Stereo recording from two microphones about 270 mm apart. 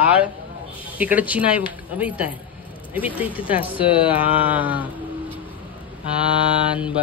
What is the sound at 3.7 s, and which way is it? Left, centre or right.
Speech, centre.